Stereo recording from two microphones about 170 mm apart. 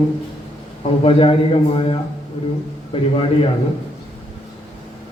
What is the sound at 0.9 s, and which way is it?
A man's voice, 35° left (ahead or behind).